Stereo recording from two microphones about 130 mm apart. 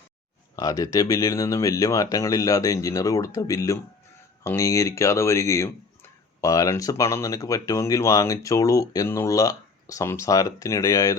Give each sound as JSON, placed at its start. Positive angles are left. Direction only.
{"t": 0.5, "sound": "speech", "side_deg": 25}